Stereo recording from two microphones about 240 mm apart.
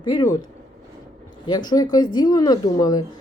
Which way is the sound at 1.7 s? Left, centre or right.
Centre.